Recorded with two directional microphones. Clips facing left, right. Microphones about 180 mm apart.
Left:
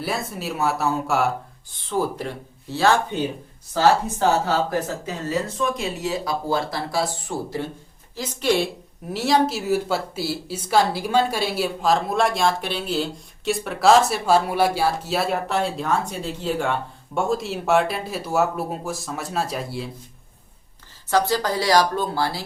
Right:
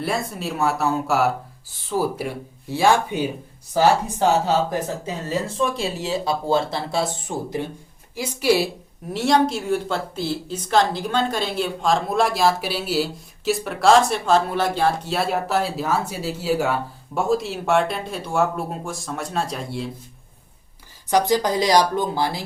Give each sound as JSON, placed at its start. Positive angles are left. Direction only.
{"t": 0.0, "sound": "a woman's voice", "side_deg": 0}
{"t": 5.5, "sound": "a woman's voice", "side_deg": -30}
{"t": 21.1, "sound": "speech", "side_deg": -15}